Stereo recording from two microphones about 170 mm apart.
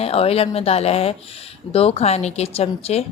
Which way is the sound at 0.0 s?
35° left (ahead or behind).